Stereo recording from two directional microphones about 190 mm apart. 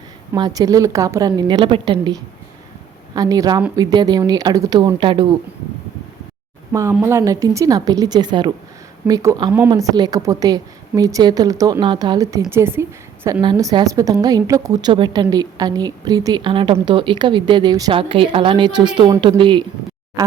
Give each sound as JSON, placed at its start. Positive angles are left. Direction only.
{"t": 0.3, "sound": "a woman's voice", "side_deg": -20}
{"t": 6.9, "sound": "a woman's voice", "side_deg": -10}